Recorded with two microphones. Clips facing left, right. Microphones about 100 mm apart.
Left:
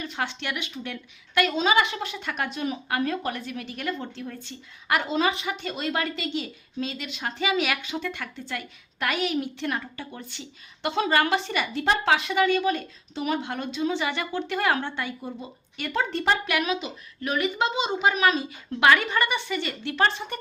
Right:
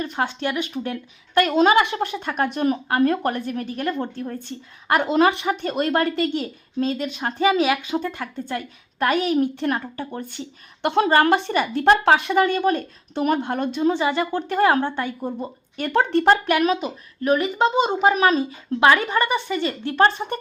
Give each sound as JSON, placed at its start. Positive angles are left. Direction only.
{"t": 0.0, "sound": "speech", "side_deg": -45}
{"t": 1.5, "sound": "a woman's voice", "side_deg": -55}
{"t": 11.1, "sound": "a woman's voice", "side_deg": -45}
{"t": 14.0, "sound": "speech", "side_deg": -30}
{"t": 14.3, "sound": "a woman's voice", "side_deg": -45}
{"t": 15.9, "sound": "speech", "side_deg": -60}